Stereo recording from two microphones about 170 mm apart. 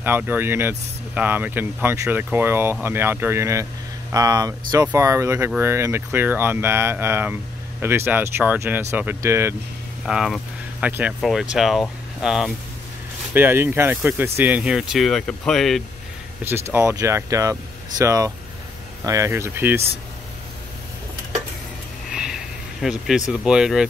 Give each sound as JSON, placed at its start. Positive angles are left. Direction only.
{"t": 0.0, "sound": "speech", "side_deg": -10}
{"t": 10.0, "sound": "speech", "side_deg": -5}
{"t": 16.4, "sound": "speech", "side_deg": -15}
{"t": 22.1, "sound": "a sound", "side_deg": -5}